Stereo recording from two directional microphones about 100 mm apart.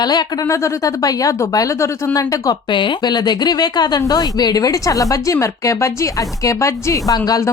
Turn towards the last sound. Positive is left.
turn(degrees=40)  # may be behind; listen again after turning